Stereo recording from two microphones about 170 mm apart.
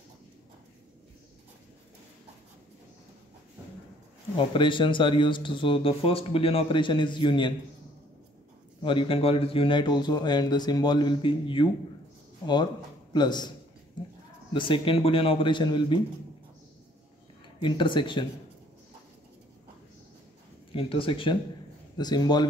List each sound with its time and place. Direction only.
4.4 s speech: 30° left (ahead or behind)
8.8 s speech: 30° left (ahead or behind)
13.1 s speech: 25° left (ahead or behind)
14.5 s a man's voice: 30° left (ahead or behind)
17.6 s speech: 30° left (ahead or behind)
20.7 s a man's voice: 30° left (ahead or behind)